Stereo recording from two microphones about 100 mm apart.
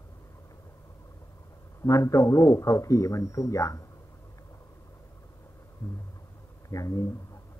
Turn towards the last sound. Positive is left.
turn(degrees=35)  # may be behind; listen again after turning